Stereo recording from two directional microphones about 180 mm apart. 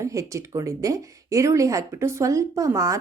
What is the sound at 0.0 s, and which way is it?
A woman's voice, 15° right (ahead or behind).